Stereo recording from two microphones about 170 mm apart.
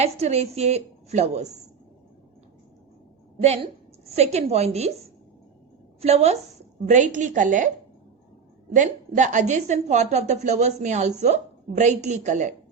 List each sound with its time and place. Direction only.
0.0 s a woman's voice: 40° right (ahead or behind)
3.4 s a woman's voice: 40° right (ahead or behind)
8.7 s a woman's voice: 50° right (ahead or behind)